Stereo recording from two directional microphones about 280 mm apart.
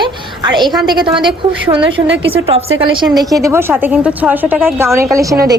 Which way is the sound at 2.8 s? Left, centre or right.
Centre.